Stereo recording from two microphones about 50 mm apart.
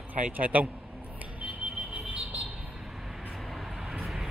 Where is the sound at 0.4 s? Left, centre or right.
Right.